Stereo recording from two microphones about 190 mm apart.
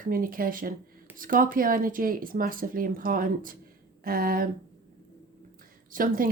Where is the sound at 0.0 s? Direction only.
45° right (ahead or behind).